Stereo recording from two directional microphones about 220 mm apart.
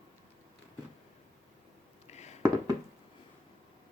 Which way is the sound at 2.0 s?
30° left (ahead or behind).